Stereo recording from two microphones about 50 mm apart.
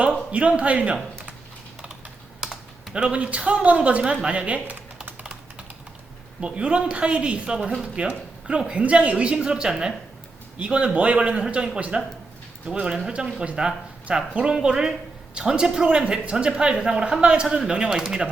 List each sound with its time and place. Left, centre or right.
0.3 s speech: right
2.9 s speech: right
5.2 s typing: centre
6.4 s speech: right
13.1 s speech: centre
13.4 s speech: right
13.7 s speech: centre